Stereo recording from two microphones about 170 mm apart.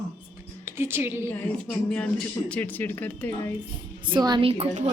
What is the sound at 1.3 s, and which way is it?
Speech, 10° left (ahead or behind).